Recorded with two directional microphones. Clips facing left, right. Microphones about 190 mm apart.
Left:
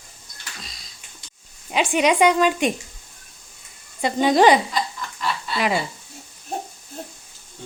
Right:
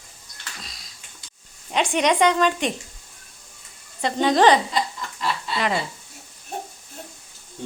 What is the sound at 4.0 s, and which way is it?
Speech, 10° left (ahead or behind).